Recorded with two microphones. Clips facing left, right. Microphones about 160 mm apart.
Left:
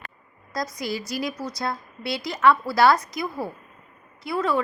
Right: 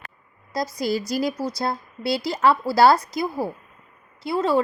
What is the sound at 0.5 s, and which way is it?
A woman's voice, 30° right (ahead or behind).